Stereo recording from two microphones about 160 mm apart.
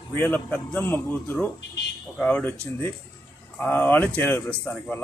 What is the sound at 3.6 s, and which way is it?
Speech, 10° left (ahead or behind).